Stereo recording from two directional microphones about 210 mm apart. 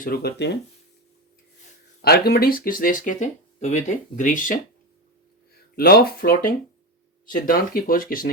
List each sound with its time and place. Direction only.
0.0 s speech: 50° left (ahead or behind)
2.0 s speech: 50° left (ahead or behind)
5.7 s speech: 45° left (ahead or behind)